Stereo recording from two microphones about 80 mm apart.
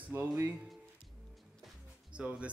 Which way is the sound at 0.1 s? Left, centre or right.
Right.